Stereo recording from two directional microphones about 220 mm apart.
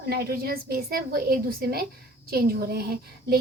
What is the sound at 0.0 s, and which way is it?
A woman's voice, 45° right (ahead or behind).